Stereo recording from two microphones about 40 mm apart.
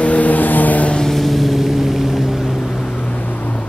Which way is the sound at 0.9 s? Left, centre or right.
Centre.